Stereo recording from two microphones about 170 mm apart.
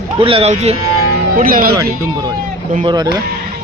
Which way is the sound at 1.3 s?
55° right (ahead or behind).